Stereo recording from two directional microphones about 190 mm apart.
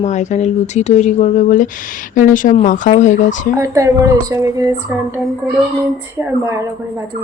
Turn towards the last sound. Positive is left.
turn(degrees=-15)  # may be behind; listen again after turning